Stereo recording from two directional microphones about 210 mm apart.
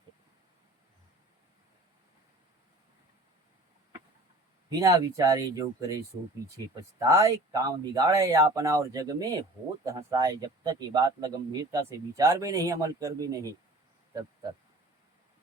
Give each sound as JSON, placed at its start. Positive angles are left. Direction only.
{"t": 4.8, "sound": "speech", "side_deg": -15}
{"t": 7.1, "sound": "speech", "side_deg": -15}